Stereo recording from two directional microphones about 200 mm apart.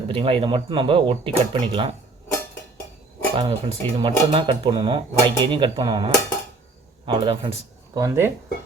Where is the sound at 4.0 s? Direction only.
25° right (ahead or behind).